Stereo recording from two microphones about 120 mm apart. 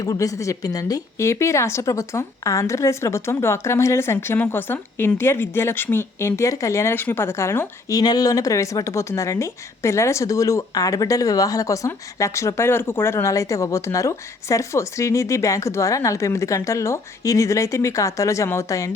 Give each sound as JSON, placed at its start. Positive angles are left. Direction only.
{"t": 0.0, "sound": "speech", "side_deg": 30}
{"t": 7.9, "sound": "speech", "side_deg": 30}